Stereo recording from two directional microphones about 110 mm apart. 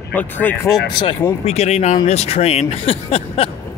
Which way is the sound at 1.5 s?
85° left.